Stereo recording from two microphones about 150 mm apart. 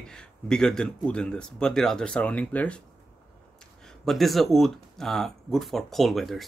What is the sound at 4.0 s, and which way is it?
Speech, centre (ahead or behind).